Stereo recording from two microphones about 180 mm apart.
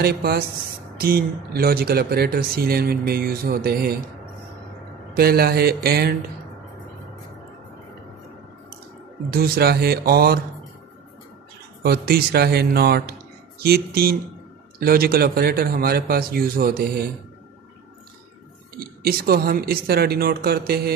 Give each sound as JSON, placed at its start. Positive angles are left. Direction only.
{"t": 0.0, "sound": "speech", "side_deg": -60}
{"t": 5.1, "sound": "speech", "side_deg": -60}
{"t": 9.3, "sound": "speech", "side_deg": -60}
{"t": 11.8, "sound": "speech", "side_deg": -60}
{"t": 18.8, "sound": "speech", "side_deg": -55}